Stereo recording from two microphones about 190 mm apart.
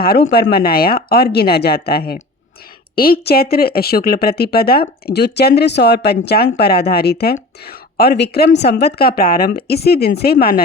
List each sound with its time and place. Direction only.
0.0 s a woman's voice: 55° left (ahead or behind)